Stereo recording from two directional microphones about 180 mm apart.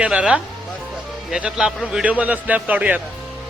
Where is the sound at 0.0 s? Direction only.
5° right (ahead or behind).